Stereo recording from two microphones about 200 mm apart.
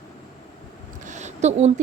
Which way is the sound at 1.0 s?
35° right (ahead or behind).